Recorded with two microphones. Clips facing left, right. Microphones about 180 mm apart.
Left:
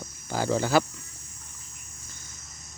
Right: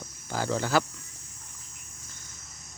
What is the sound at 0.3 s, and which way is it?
Speech, 15° left (ahead or behind).